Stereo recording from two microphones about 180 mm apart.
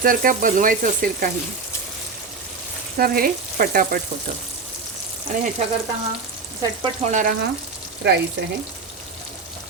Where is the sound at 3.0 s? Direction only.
55° right (ahead or behind).